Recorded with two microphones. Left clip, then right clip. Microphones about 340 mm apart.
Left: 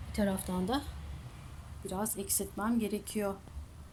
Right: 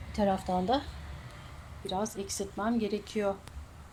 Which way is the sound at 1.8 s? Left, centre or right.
Centre.